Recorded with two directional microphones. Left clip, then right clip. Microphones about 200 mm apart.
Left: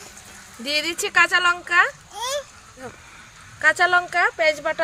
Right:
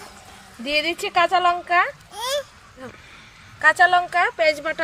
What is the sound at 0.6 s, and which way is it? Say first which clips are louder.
Speech: right 1 dB; 60° left (ahead or behind).